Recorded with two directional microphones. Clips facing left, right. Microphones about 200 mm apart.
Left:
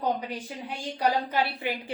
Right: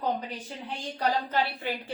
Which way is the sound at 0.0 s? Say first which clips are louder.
Left 2 dB; 15° left (ahead or behind).